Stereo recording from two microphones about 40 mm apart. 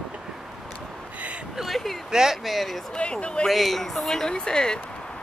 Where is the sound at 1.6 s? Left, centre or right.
Centre.